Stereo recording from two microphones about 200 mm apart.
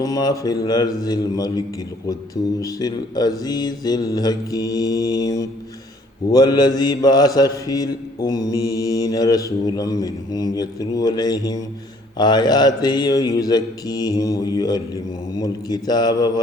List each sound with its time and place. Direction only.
0.0 s mantra: 20° left (ahead or behind)